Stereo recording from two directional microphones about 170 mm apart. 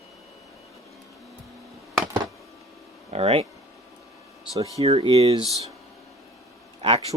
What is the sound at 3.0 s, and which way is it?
Speech, 35° right (ahead or behind).